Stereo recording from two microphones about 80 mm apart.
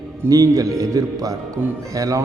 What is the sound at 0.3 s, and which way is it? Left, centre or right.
A man's voice, right.